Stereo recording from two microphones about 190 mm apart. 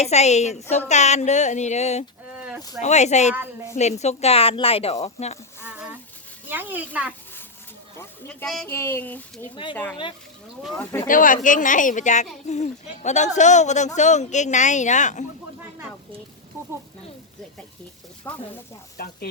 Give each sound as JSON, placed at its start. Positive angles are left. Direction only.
{"t": 0.0, "sound": "speech", "side_deg": 35}
{"t": 5.6, "sound": "a sound", "side_deg": -10}
{"t": 6.5, "sound": "speech", "side_deg": -10}
{"t": 7.9, "sound": "speech", "side_deg": 10}
{"t": 10.8, "sound": "speech", "side_deg": 15}
{"t": 11.1, "sound": "speech", "side_deg": 45}
{"t": 18.3, "sound": "speech", "side_deg": 10}